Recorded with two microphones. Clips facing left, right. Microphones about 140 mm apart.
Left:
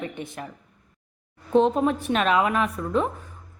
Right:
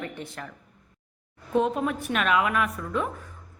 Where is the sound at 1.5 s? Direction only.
30° left (ahead or behind).